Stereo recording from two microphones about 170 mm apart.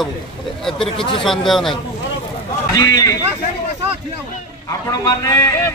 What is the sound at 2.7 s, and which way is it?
Speech, 25° left (ahead or behind).